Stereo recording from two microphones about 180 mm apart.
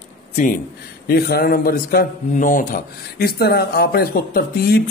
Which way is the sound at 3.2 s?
60° left (ahead or behind).